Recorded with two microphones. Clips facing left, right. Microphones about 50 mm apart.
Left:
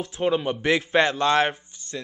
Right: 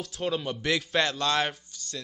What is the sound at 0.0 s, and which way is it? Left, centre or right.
Speech, left.